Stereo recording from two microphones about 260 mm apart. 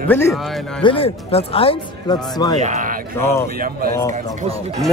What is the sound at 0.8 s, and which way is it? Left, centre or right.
Speech, left.